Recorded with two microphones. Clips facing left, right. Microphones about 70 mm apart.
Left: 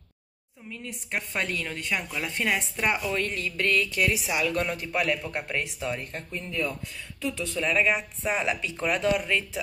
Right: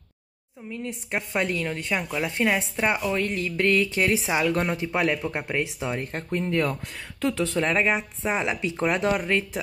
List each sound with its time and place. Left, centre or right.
0.7 s speech: right
6.3 s speech: right
7.7 s speech: right
9.1 s speech: right